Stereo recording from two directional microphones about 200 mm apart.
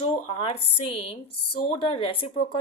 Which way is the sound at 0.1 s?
30° left (ahead or behind).